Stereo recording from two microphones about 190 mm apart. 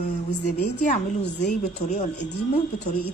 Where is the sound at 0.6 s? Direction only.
35° left (ahead or behind).